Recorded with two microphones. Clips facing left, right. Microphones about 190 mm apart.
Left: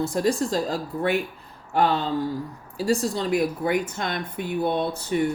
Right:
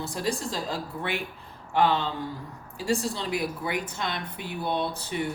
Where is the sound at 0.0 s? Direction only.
45° left (ahead or behind).